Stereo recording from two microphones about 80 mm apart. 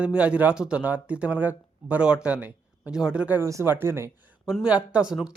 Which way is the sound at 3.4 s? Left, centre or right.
Right.